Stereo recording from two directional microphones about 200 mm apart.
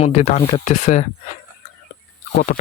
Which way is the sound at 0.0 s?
35° left (ahead or behind).